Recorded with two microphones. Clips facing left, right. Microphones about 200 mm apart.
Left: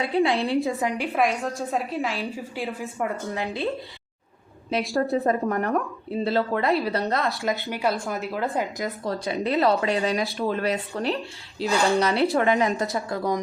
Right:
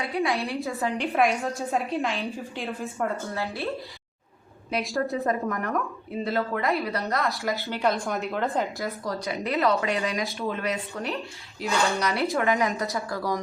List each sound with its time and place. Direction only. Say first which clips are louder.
0.0 s speech: left 5 dB; 30° left (ahead or behind)
0.6 s a woman's voice: left 3 dB; 15° left (ahead or behind)
1.1 s a woman's voice: even; centre (ahead or behind); by 3.7 s 15° left (ahead or behind)
4.7 s speech: left 4 dB; 25° left (ahead or behind)
7.4 s a woman's voice: left 2 dB; 15° left (ahead or behind)
7.8 s a woman's voice: even; 5° left (ahead or behind)
9.0 s speech: left 5 dB; 30° left (ahead or behind)
11.6 s a woman's voice: left 4 dB; centre (ahead or behind)
11.9 s speech: left 5 dB; 25° left (ahead or behind)